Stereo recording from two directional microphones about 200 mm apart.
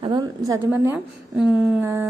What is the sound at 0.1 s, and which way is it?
A woman's voice, 20° right (ahead or behind).